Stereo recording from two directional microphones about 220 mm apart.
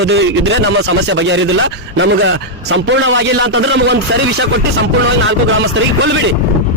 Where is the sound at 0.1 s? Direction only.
55° right (ahead or behind).